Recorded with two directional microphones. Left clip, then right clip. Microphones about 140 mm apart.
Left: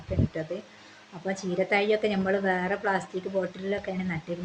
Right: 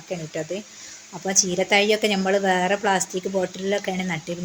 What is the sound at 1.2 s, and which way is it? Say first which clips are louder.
A woman's voice: right 7 dB; 35° right (ahead or behind).